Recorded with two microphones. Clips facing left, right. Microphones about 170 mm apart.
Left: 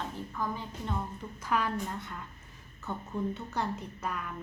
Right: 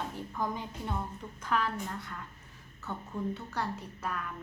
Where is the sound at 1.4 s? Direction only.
10° left (ahead or behind).